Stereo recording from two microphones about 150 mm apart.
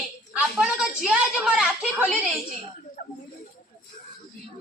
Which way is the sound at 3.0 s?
75° left (ahead or behind).